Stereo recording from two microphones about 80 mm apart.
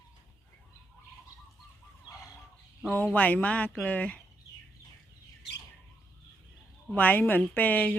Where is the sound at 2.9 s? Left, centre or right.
Centre.